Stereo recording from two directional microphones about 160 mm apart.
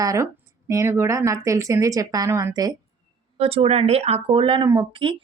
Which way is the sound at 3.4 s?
35° right (ahead or behind).